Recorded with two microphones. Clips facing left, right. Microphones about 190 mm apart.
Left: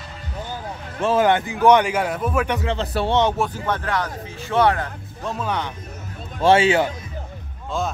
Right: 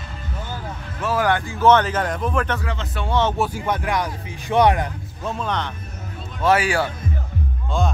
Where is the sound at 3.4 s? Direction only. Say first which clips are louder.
Right 1 dB; 10° right (ahead or behind).